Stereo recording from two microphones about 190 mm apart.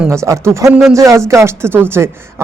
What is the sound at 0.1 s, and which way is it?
Speech, 15° right (ahead or behind).